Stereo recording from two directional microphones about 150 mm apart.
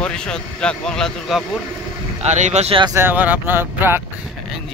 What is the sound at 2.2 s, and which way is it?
Speech, 50° right (ahead or behind).